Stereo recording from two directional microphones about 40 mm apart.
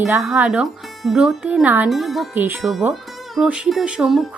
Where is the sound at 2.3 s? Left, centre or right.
Right.